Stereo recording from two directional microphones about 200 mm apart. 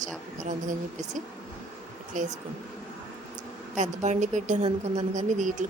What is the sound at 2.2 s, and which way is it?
Speech, 40° right (ahead or behind).